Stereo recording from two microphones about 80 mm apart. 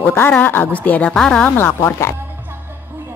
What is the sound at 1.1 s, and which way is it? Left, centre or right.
Speech, centre.